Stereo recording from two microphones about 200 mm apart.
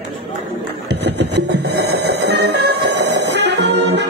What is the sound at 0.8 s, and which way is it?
Music, 55° right (ahead or behind).